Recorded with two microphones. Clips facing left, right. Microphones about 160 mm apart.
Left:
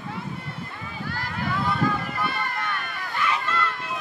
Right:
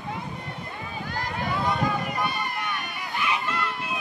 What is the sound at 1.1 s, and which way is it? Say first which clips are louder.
Run: even; 15° right (ahead or behind).